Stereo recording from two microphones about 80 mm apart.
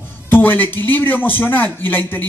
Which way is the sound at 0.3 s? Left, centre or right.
Left.